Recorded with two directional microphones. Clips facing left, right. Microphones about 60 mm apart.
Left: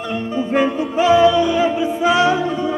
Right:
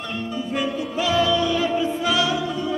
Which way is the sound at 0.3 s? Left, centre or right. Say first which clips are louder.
Left 8 dB; left.